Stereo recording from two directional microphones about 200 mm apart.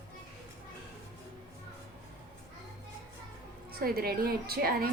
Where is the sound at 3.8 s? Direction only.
50° right (ahead or behind).